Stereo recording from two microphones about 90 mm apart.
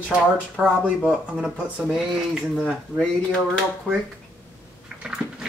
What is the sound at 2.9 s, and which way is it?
Speech, 15° left (ahead or behind).